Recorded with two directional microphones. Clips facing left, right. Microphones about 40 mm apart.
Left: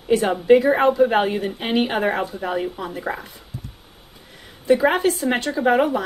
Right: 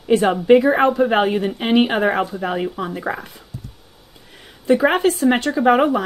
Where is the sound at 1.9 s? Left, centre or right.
Right.